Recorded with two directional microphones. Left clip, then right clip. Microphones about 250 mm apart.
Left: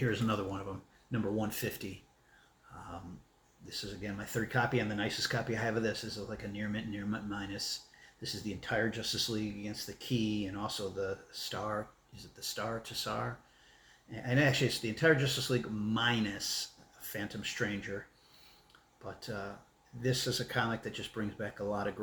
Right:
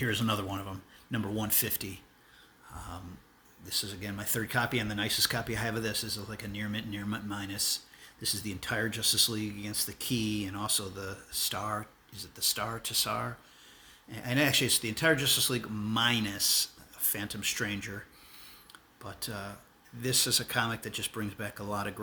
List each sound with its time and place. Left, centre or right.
0.0 s speech: right
3.7 s speech: right
19.0 s speech: right